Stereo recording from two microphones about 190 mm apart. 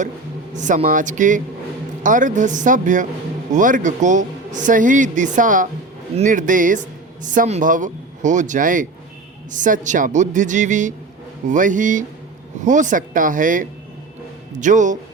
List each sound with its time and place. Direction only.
0.5 s speech: 40° right (ahead or behind)